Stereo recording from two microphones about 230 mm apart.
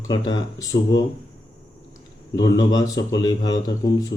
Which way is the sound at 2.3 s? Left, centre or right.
Centre.